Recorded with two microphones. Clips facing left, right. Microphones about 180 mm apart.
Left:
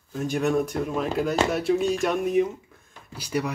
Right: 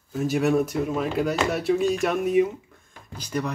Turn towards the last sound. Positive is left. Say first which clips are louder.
# left 1 dB
turn(degrees=10)  # may be behind; listen again after turning